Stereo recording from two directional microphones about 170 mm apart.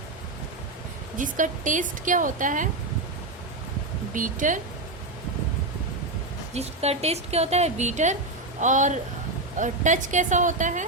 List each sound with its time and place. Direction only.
1.1 s a woman's voice: 50° right (ahead or behind)
4.1 s a woman's voice: 50° right (ahead or behind)
6.5 s a woman's voice: 40° right (ahead or behind)